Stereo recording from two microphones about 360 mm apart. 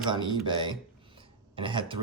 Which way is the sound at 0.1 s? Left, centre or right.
Centre.